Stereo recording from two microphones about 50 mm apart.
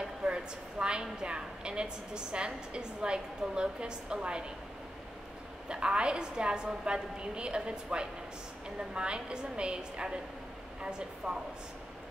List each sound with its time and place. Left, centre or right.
0.0 s a sound: centre
1.2 s a woman's voice: centre
5.7 s a woman's voice: centre